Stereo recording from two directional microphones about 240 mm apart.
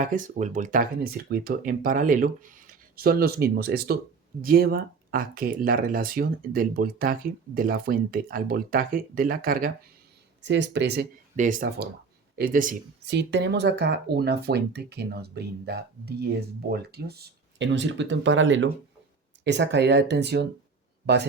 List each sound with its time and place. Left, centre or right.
0.0 s speech: right
10.4 s speech: right